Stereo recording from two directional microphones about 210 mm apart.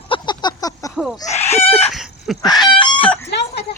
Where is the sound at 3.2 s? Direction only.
55° left (ahead or behind).